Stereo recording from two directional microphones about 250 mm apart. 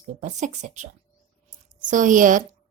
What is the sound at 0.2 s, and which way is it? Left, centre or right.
Speech, right.